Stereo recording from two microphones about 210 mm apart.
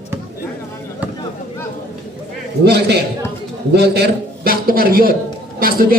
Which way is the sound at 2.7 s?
50° right (ahead or behind).